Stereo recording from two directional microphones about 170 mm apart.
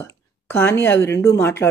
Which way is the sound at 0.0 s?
15° left (ahead or behind).